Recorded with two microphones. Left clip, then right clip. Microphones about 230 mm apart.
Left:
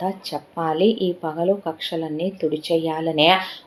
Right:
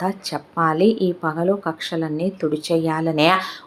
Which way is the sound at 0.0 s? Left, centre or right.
Right.